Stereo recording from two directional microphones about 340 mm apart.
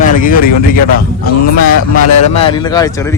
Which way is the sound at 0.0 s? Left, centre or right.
Left.